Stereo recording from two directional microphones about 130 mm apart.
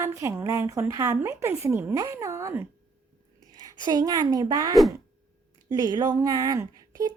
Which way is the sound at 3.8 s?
30° right (ahead or behind).